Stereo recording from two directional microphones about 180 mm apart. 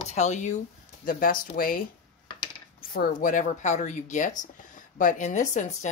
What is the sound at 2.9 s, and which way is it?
Speech, 50° left (ahead or behind).